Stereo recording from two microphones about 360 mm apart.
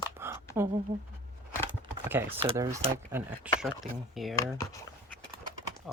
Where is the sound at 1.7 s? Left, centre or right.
Centre.